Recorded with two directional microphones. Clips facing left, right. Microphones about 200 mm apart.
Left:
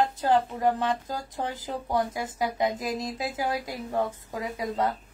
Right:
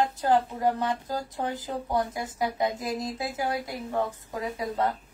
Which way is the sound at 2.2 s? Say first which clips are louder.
Even; 20° right (ahead or behind).